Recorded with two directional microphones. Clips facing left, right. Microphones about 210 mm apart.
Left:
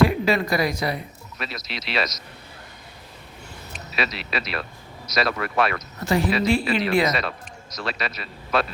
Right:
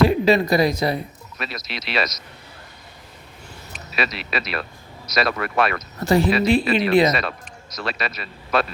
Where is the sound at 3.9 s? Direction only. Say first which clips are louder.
Right 2 dB; 55° right (ahead or behind).